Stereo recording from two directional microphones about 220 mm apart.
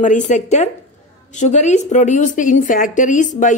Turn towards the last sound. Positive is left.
turn(degrees=35)  # may be behind; listen again after turning